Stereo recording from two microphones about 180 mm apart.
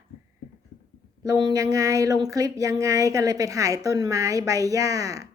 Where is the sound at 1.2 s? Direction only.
20° right (ahead or behind).